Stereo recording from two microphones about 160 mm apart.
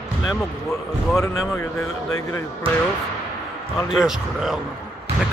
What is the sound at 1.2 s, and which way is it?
A man's voice, 20° left (ahead or behind).